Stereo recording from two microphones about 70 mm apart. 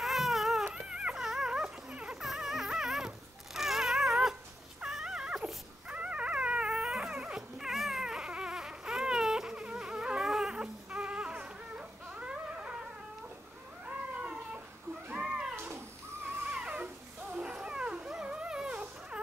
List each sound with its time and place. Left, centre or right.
0.0 s baby cry: centre
0.7 s dog: centre
13.8 s cat: centre
16.4 s music: centre